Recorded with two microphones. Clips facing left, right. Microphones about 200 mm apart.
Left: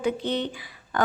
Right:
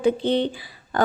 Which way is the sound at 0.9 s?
35° right (ahead or behind).